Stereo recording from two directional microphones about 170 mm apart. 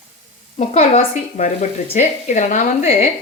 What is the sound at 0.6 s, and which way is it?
Speech, 40° left (ahead or behind).